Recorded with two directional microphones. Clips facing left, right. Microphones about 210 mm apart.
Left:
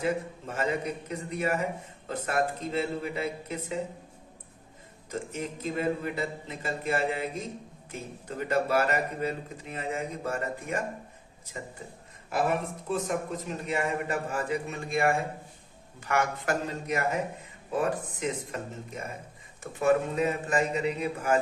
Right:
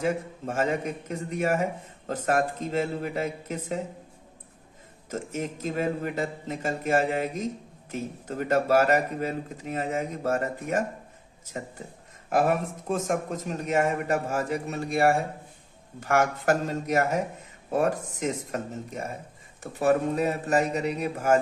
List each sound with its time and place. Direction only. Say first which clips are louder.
0.0 s speech: right 2 dB; 45° right (ahead or behind)
5.1 s speech: right 3 dB; 45° right (ahead or behind)
12.3 s a man's voice: right 4 dB; 45° right (ahead or behind)